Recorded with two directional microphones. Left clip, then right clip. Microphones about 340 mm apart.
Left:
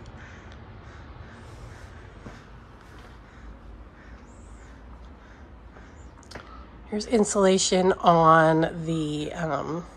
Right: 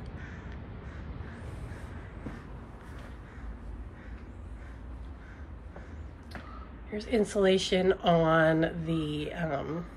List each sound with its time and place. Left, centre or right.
6.9 s a woman's voice: centre